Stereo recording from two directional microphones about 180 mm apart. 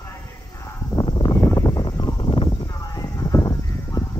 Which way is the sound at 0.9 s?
25° left (ahead or behind).